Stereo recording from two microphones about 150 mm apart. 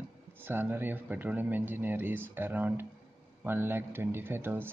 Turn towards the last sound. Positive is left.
turn(degrees=-15)  # may be behind; listen again after turning